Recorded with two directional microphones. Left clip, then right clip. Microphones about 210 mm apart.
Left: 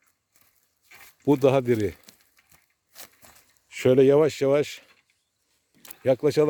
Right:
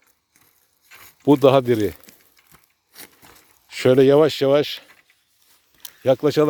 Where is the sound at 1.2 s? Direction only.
10° left (ahead or behind).